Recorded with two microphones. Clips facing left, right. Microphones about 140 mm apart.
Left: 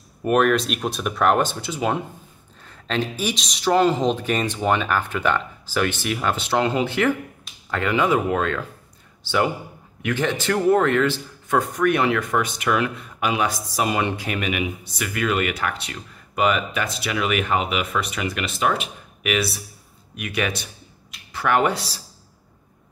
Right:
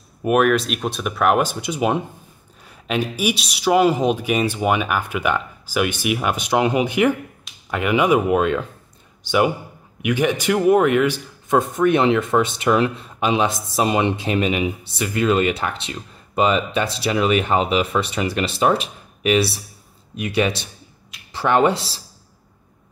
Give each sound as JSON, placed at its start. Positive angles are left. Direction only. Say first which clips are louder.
{"t": 0.2, "sound": "a man's voice", "louder": "right 2 dB", "side_deg": -5}